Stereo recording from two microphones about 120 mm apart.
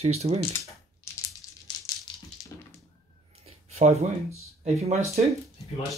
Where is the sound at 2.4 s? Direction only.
30° left (ahead or behind).